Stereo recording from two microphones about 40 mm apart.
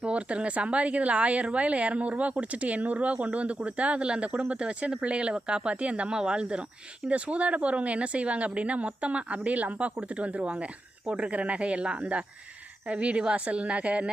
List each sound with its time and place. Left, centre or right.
0.0 s speech: right
11.3 s speech: right